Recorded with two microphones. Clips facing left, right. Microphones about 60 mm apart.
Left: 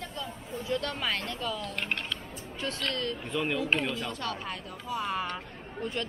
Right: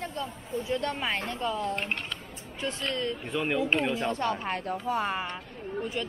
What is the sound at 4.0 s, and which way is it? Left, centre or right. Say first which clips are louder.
Speech: right 6 dB; right.